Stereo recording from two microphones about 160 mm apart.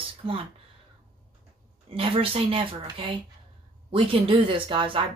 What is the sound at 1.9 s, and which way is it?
Speech, 35° right (ahead or behind).